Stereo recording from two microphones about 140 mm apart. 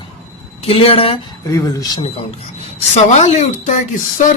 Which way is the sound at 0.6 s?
45° left (ahead or behind).